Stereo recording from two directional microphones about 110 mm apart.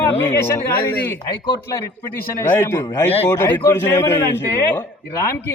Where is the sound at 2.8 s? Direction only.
35° left (ahead or behind).